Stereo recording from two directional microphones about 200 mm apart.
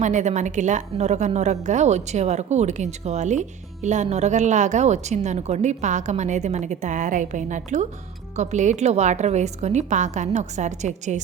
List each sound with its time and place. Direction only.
0.0 s a woman's voice: 35° right (ahead or behind)